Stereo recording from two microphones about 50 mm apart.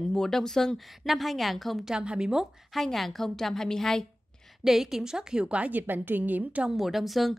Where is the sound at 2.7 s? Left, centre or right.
Centre.